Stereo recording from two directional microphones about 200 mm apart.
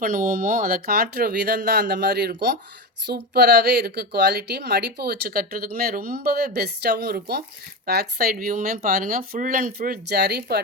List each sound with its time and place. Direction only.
0.0 s a woman's voice: 45° right (ahead or behind)